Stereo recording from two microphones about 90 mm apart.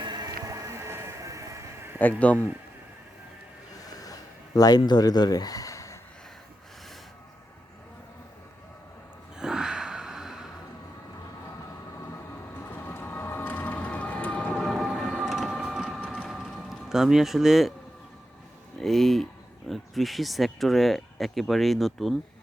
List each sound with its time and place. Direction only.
0.0 s music: 50° right (ahead or behind)
2.0 s a man's voice: 15° left (ahead or behind)
3.8 s a sound: 45° left (ahead or behind)
4.9 s speech: 50° left (ahead or behind)
9.4 s gasp: 5° right (ahead or behind)
12.5 s a sound: 20° left (ahead or behind)
14.6 s train: centre (ahead or behind)
15.1 s printer: 5° right (ahead or behind)
16.3 s a sound: 5° right (ahead or behind)
18.8 s speech: 5° left (ahead or behind)